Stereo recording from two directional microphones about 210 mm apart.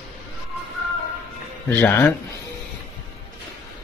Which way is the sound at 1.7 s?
10° left (ahead or behind).